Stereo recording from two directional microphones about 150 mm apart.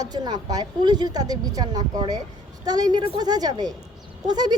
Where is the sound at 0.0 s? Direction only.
25° right (ahead or behind).